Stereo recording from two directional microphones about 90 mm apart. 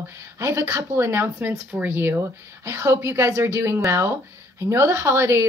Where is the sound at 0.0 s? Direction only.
30° right (ahead or behind).